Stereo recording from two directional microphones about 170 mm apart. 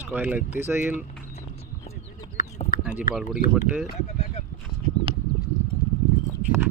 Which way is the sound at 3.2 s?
50° left (ahead or behind).